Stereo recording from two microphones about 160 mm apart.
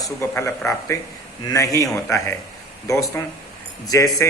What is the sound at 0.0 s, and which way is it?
A man's voice, 20° left (ahead or behind).